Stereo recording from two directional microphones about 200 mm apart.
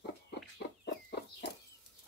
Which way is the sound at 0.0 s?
60° left (ahead or behind).